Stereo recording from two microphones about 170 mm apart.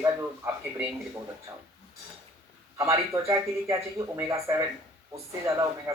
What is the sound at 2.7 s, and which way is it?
Speech, 20° right (ahead or behind).